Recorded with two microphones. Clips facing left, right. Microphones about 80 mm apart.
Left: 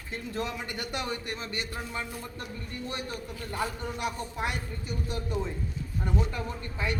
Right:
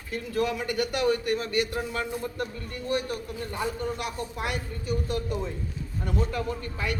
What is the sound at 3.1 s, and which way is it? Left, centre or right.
Speech, centre.